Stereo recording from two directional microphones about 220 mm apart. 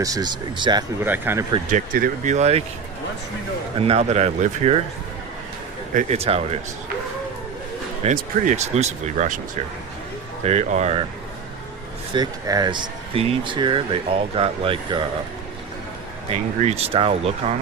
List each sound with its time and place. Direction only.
0.0 s speech: 15° right (ahead or behind)
1.7 s speech: 35° right (ahead or behind)
3.8 s speech: 25° right (ahead or behind)
5.9 s speech: 30° right (ahead or behind)
8.0 s speech: 30° right (ahead or behind)
10.4 s speech: 30° right (ahead or behind)
12.1 s speech: 20° right (ahead or behind)
16.6 s speech: 30° right (ahead or behind)